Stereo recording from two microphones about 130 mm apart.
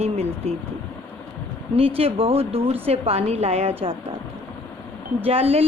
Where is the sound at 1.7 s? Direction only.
50° right (ahead or behind).